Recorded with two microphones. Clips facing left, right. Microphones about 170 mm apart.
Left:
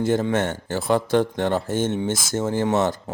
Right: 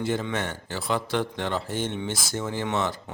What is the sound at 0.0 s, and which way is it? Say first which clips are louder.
Speech: left 7 dB; 45° left (ahead or behind).